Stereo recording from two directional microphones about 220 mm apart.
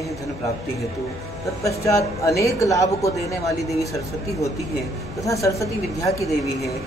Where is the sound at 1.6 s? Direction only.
15° left (ahead or behind).